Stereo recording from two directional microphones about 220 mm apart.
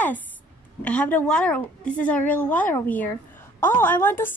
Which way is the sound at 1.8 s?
35° left (ahead or behind).